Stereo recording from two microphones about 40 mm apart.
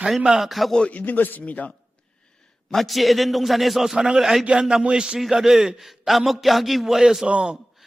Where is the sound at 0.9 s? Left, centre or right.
Left.